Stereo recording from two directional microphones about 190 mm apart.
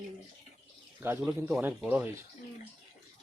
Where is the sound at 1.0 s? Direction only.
10° right (ahead or behind).